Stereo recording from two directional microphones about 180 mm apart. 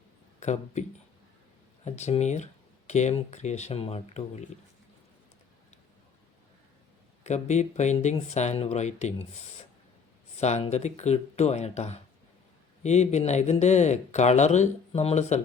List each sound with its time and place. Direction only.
0.3 s speech: 40° left (ahead or behind)
7.3 s speech: 40° left (ahead or behind)